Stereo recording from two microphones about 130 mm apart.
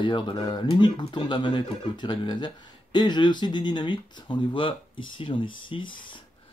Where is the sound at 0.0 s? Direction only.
35° left (ahead or behind).